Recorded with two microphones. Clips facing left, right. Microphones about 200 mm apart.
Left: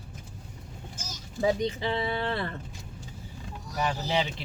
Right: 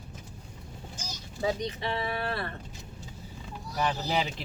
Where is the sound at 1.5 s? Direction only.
25° left (ahead or behind).